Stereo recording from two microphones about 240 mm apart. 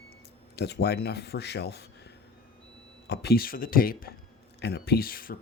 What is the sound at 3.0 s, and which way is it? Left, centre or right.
Speech, left.